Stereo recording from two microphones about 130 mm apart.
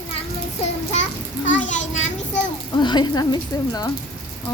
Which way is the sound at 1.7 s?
65° left (ahead or behind).